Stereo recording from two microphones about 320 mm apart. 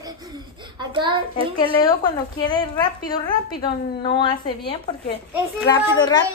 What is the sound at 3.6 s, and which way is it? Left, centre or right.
Speech, left.